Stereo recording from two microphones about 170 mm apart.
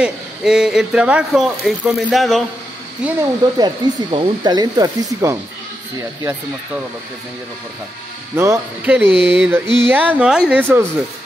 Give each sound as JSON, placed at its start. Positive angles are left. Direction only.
{"t": 0.0, "sound": "a man's voice", "side_deg": -5}
{"t": 3.2, "sound": "speech", "side_deg": -25}
{"t": 8.4, "sound": "speech", "side_deg": -10}